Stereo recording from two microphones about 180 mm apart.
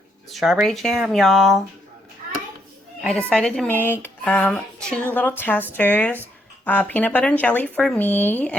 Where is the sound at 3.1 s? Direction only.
5° left (ahead or behind).